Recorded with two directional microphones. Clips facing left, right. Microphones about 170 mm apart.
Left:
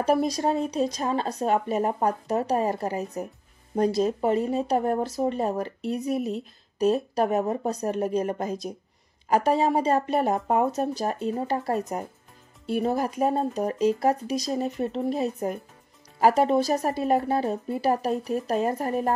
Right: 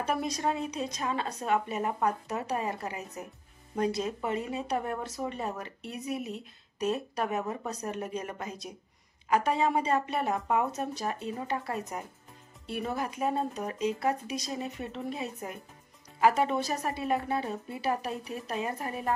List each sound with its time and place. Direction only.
0.0 s speech: 35° left (ahead or behind)